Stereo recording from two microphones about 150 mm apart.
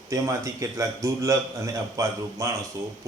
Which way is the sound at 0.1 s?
20° right (ahead or behind).